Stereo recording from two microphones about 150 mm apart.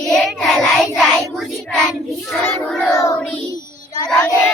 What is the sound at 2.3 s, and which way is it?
Child singing, 15° left (ahead or behind).